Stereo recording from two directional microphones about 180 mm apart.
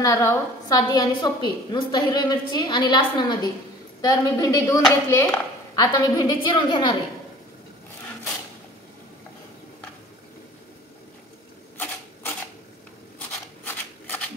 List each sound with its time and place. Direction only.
0.0 s a woman's voice: 15° left (ahead or behind)
13.7 s shuffling cards: 10° left (ahead or behind)